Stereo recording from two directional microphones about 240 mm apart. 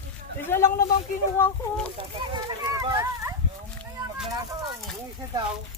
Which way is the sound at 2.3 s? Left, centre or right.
Centre.